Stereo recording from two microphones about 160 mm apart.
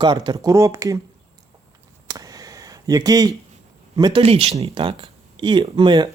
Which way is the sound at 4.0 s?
25° right (ahead or behind).